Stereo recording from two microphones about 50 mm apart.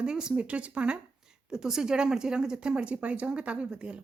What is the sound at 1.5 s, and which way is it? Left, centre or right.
A woman's voice, centre.